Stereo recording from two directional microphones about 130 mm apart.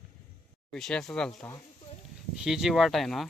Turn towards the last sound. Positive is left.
turn(degrees=0)  # may be behind; listen again after turning